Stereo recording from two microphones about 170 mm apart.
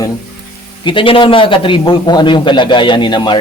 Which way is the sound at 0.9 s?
30° left (ahead or behind).